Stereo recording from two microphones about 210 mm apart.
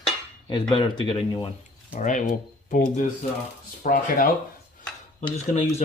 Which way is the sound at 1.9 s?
35° left (ahead or behind).